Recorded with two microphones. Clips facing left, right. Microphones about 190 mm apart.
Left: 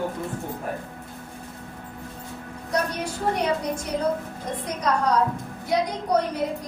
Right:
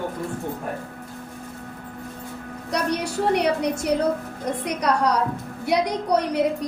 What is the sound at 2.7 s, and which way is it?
A woman's voice, 70° right (ahead or behind).